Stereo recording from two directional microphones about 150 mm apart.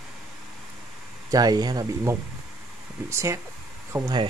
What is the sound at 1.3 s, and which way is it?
Speech, 25° right (ahead or behind).